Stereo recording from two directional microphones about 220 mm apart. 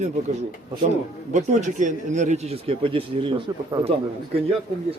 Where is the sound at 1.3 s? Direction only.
35° right (ahead or behind).